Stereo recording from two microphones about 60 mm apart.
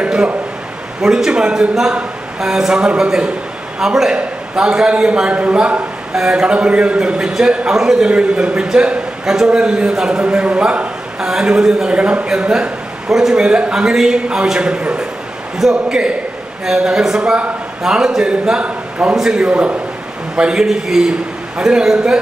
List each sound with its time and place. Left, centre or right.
0.0 s a man's voice: centre
19.1 s a man's voice: centre